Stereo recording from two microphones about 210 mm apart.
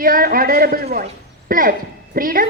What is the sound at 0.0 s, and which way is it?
A woman's voice, 45° right (ahead or behind).